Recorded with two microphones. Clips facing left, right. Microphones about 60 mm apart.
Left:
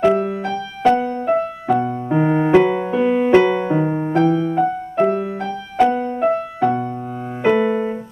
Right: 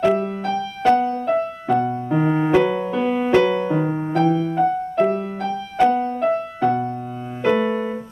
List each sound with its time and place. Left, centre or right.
0.0 s music: centre
7.4 s keyboard: centre